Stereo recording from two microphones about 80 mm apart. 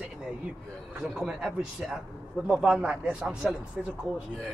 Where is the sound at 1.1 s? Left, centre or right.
Centre.